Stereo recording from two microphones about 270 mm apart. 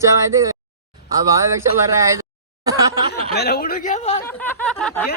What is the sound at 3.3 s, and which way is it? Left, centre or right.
Speech, left.